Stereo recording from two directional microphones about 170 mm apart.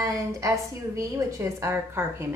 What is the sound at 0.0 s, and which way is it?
A woman's voice, 20° right (ahead or behind).